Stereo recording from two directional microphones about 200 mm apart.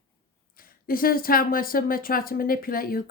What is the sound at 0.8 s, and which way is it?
Speech, 45° left (ahead or behind).